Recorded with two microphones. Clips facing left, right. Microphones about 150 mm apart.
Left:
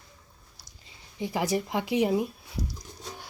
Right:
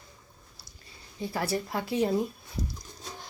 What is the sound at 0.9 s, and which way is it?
Speech, 15° left (ahead or behind).